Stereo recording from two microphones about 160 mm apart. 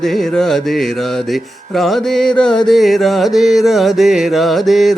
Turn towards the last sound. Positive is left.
turn(degrees=0)  # may be behind; listen again after turning